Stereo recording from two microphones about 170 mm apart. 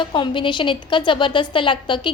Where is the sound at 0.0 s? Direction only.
30° left (ahead or behind).